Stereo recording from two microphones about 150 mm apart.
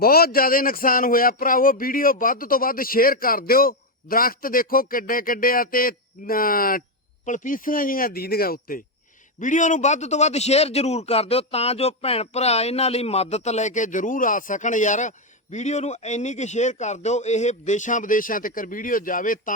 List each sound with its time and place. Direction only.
0.0 s speech: 90° left; by 6.8 s 70° left (ahead or behind)
7.3 s speech: 60° left (ahead or behind); by 8.8 s 75° left (ahead or behind)
9.4 s a man's voice: 55° left (ahead or behind)